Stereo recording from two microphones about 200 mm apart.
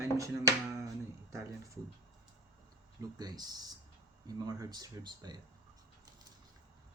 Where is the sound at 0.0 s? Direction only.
15° right (ahead or behind).